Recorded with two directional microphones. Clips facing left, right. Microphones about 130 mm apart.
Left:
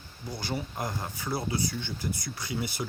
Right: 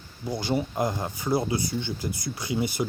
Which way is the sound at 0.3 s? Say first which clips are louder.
Right 8 dB; 20° right (ahead or behind).